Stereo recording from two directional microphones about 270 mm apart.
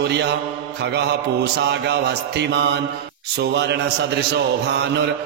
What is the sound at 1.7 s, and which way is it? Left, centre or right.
Speech, right.